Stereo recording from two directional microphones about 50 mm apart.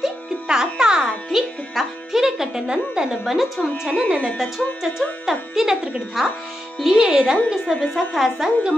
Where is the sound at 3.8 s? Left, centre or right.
Right.